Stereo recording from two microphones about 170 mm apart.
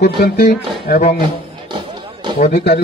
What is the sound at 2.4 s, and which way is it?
Speech, 65° left (ahead or behind).